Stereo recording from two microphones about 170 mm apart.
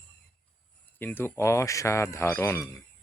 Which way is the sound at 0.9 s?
10° left (ahead or behind).